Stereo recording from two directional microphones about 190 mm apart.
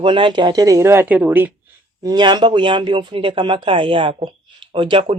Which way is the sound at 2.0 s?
20° right (ahead or behind).